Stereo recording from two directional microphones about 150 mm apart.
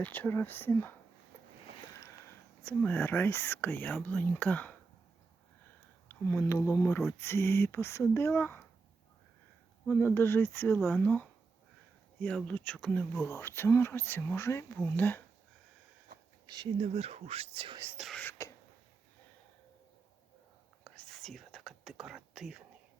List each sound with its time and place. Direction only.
0.0 s speech: 10° left (ahead or behind)
2.6 s speech: 10° left (ahead or behind)
6.1 s speech: 15° left (ahead or behind)
9.8 s speech: 10° left (ahead or behind)
13.1 s speech: 20° left (ahead or behind)
16.1 s a sound: 75° right (ahead or behind)
16.7 s speech: 45° right (ahead or behind)
17.9 s speech: centre (ahead or behind)
18.2 s throat clearing: 20° left (ahead or behind)
20.8 s whispering: 5° left (ahead or behind)